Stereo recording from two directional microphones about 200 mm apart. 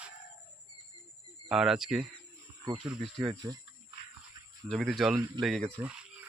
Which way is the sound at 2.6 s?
25° right (ahead or behind).